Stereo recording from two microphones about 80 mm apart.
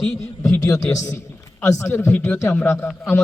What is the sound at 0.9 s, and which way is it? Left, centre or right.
Speech, left.